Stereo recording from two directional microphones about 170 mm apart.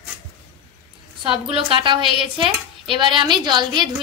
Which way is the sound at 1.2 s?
30° right (ahead or behind).